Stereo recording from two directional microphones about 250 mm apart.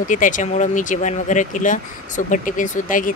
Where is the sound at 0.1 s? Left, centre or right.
Left.